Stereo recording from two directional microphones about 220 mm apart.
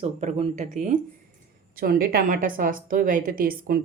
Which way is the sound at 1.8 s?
45° right (ahead or behind).